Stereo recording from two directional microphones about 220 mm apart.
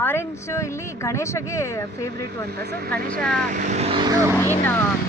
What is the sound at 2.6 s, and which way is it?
Speech, 45° right (ahead or behind).